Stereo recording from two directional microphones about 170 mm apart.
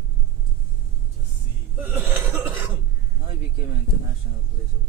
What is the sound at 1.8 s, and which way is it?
Cough, 10° right (ahead or behind).